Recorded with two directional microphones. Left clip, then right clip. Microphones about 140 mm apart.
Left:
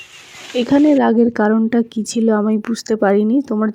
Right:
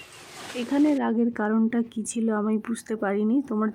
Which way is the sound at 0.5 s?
45° left (ahead or behind).